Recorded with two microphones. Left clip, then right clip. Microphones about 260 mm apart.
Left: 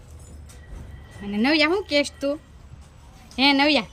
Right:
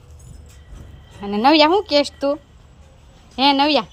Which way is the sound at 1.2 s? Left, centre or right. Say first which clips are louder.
Right 7 dB; centre.